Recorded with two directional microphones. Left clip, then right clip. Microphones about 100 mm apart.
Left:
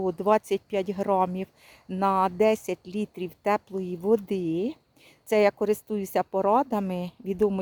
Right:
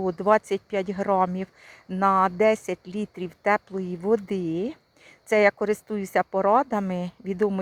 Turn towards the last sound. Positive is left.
turn(degrees=25)  # may be behind; listen again after turning